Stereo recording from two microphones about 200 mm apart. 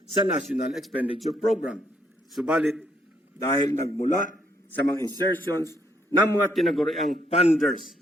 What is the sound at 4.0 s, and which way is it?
Speech, 40° left (ahead or behind).